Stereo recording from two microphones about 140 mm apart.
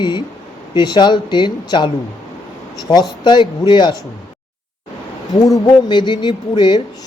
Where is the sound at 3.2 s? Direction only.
35° left (ahead or behind).